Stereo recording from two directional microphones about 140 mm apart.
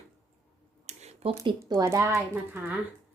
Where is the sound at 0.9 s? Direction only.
50° right (ahead or behind).